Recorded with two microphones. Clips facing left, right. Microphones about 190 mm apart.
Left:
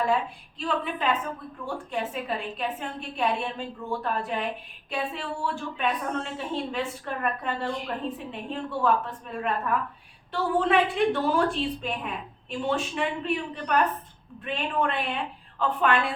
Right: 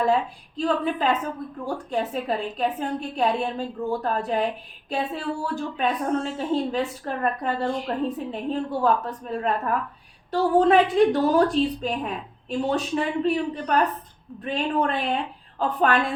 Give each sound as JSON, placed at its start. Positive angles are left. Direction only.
{"t": 0.0, "sound": "a woman's voice", "side_deg": -40}